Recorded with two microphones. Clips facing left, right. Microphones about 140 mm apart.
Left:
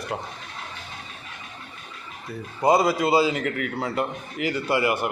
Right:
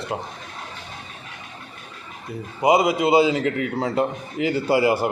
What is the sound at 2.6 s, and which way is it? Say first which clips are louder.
A man's voice: right 2 dB; 20° right (ahead or behind).